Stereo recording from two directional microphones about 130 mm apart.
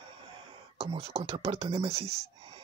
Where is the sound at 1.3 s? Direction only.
50° right (ahead or behind).